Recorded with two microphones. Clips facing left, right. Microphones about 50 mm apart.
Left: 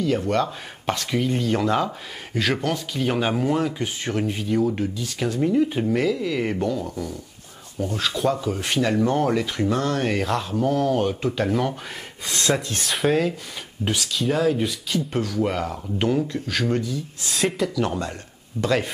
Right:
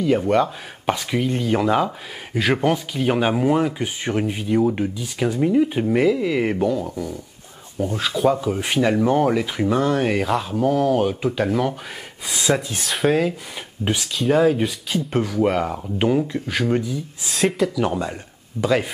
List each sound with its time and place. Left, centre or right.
0.0 s speech: centre
14.3 s speech: centre
17.3 s speech: centre
17.8 s speech: centre